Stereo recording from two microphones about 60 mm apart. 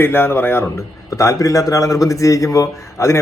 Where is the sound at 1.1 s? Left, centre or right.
Left.